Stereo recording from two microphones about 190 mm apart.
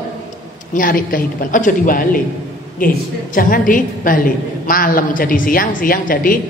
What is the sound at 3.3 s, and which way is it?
A woman's voice, 45° left (ahead or behind).